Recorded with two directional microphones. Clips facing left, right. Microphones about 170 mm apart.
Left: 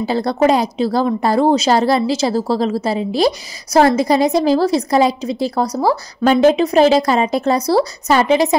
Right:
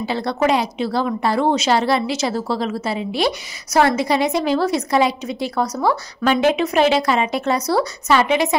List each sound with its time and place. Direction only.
0.0 s a woman's voice: 40° left (ahead or behind)